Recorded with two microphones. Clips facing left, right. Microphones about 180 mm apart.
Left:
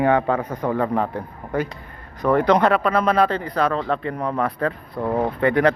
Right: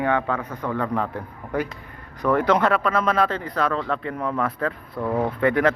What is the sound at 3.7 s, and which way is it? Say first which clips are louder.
Speech: left 3 dB; 35° left (ahead or behind).